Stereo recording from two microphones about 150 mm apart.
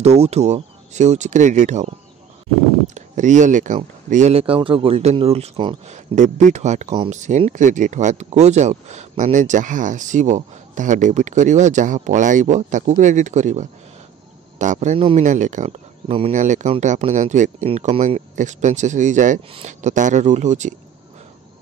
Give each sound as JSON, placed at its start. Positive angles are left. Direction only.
{"t": 0.0, "sound": "speech", "side_deg": -45}
{"t": 5.9, "sound": "speech", "side_deg": -50}
{"t": 15.0, "sound": "speech", "side_deg": -35}
{"t": 15.2, "sound": "speech", "side_deg": -55}
{"t": 16.1, "sound": "speech", "side_deg": -40}
{"t": 16.3, "sound": "speech", "side_deg": -55}
{"t": 17.6, "sound": "speech", "side_deg": -40}